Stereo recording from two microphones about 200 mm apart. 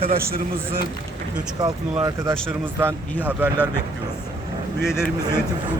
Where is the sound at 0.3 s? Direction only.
50° right (ahead or behind).